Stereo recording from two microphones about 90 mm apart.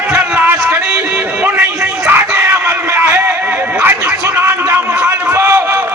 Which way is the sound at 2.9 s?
25° right (ahead or behind).